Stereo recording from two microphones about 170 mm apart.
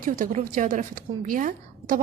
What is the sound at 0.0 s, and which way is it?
A woman's voice, 50° right (ahead or behind).